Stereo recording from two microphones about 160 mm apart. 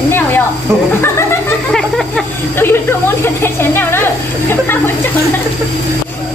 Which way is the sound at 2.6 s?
15° left (ahead or behind).